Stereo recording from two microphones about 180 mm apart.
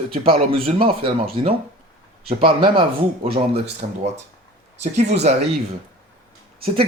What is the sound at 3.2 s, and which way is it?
Speech, 35° right (ahead or behind).